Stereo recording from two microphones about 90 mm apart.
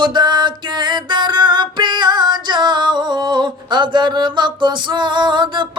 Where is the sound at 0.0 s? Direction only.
55° right (ahead or behind).